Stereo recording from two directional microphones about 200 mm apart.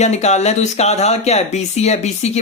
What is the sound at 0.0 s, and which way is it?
Speech, 35° left (ahead or behind).